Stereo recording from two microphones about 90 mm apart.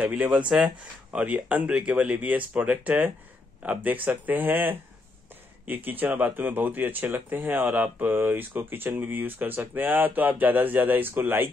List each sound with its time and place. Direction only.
0.0 s speech: 15° right (ahead or behind)